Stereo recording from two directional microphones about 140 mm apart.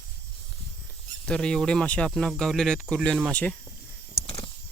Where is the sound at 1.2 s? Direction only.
5° left (ahead or behind).